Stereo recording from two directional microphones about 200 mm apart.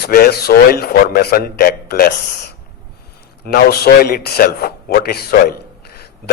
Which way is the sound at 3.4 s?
50° left (ahead or behind).